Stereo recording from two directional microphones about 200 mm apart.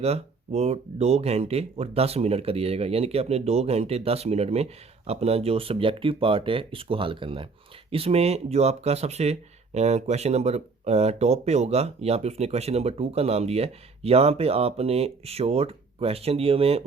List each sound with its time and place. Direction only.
0.0 s speech: 30° right (ahead or behind)